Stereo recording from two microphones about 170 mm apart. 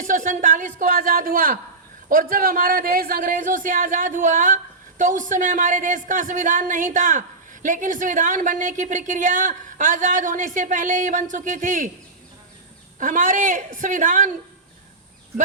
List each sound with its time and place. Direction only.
0.0 s a man's voice: 50° right (ahead or behind)
13.0 s a man's voice: 50° right (ahead or behind)